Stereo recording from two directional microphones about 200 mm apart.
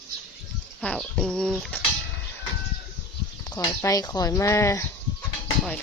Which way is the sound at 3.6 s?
20° left (ahead or behind).